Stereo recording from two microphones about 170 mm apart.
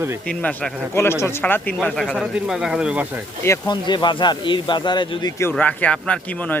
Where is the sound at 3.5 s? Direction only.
25° left (ahead or behind).